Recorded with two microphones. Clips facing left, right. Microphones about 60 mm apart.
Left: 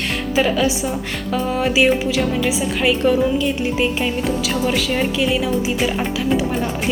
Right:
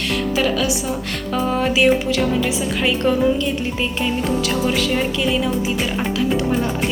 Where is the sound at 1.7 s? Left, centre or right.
Centre.